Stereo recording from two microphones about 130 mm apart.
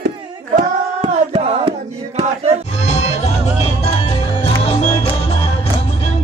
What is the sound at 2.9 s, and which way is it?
Music, 60° left (ahead or behind).